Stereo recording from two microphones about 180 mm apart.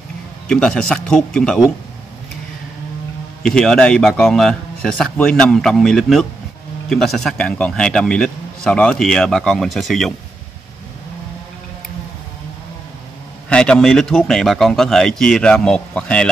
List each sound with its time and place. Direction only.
0.5 s a man's voice: 5° left (ahead or behind)
3.4 s a man's voice: 5° left (ahead or behind)
13.5 s a man's voice: 5° left (ahead or behind)